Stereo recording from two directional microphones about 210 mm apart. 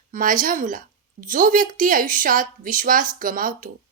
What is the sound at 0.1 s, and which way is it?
A woman's voice, 40° right (ahead or behind).